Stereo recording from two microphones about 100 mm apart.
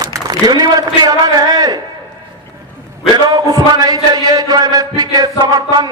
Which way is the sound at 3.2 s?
40° right (ahead or behind).